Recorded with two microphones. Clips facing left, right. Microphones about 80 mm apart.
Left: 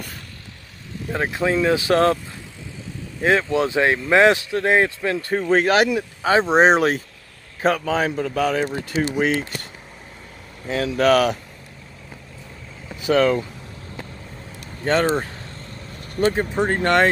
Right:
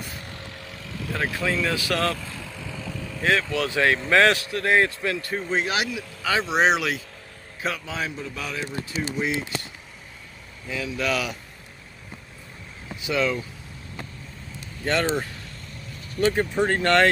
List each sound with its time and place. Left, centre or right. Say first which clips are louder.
1.0 s a man's voice: left 4 dB; left
3.2 s a man's voice: left 5 dB; left
5.5 s a man's voice: left 10 dB; left
6.2 s a man's voice: left 6 dB; left
10.7 s a man's voice: left 9 dB; left
13.0 s a man's voice: left 7 dB; left
14.9 s speech: left 5 dB; left
16.3 s a man's voice: left 1 dB; left